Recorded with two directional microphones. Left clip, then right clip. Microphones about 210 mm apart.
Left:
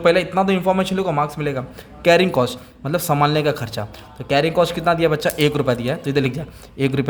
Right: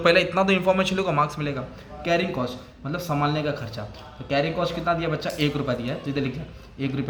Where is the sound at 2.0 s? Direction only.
50° left (ahead or behind).